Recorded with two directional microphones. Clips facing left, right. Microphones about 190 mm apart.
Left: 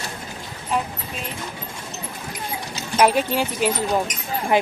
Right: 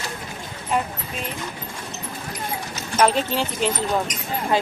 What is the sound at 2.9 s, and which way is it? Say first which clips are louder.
Speech: left 2 dB; 10° left (ahead or behind).